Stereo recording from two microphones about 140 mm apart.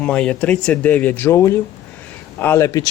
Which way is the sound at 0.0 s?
10° left (ahead or behind).